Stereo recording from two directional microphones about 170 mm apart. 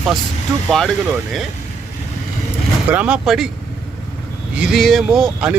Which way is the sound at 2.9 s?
10° right (ahead or behind).